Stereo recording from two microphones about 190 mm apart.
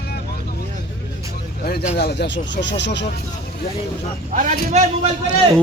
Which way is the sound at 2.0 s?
60° left (ahead or behind).